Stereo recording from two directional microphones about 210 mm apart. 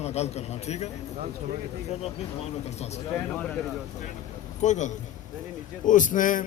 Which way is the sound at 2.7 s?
30° left (ahead or behind).